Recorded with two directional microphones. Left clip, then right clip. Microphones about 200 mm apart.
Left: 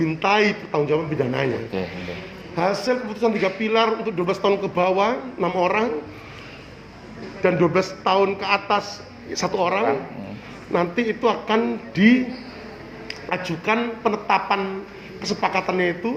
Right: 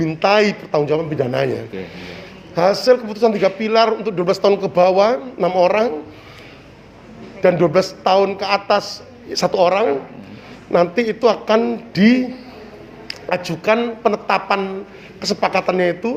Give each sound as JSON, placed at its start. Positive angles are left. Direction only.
{"t": 0.0, "sound": "a man's voice", "side_deg": -50}
{"t": 1.7, "sound": "speech", "side_deg": 25}
{"t": 2.6, "sound": "a man's voice", "side_deg": -50}
{"t": 7.4, "sound": "a man's voice", "side_deg": -50}